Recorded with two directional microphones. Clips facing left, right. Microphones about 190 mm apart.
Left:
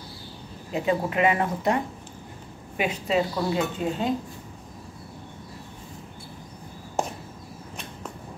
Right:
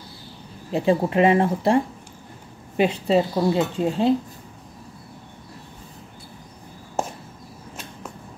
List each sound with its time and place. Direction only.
0.7 s speech: 35° right (ahead or behind)
2.8 s speech: 30° right (ahead or behind)